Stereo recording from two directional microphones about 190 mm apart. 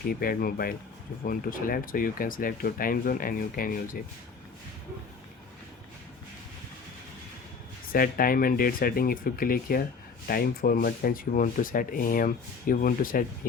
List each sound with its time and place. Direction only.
0.1 s speech: 50° left (ahead or behind)
7.9 s speech: 50° left (ahead or behind)